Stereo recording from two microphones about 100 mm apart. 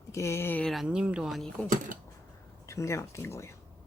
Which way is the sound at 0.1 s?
30° left (ahead or behind).